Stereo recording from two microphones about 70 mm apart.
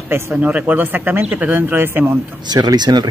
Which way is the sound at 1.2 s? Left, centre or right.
Centre.